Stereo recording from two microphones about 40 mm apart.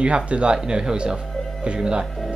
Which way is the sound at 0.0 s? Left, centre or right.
Right.